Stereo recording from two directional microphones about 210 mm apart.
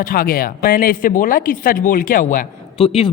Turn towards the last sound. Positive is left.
turn(degrees=30)  # may be behind; listen again after turning